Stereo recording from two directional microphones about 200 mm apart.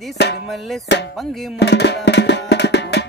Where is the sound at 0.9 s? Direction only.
60° left (ahead or behind).